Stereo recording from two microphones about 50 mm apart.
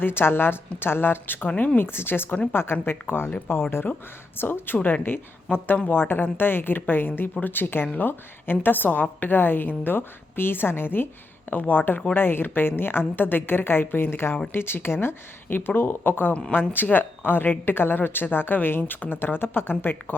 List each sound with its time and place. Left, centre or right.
0.0 s a woman's voice: left